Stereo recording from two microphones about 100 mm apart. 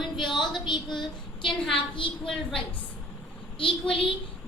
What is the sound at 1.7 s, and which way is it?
Speech, 60° left (ahead or behind).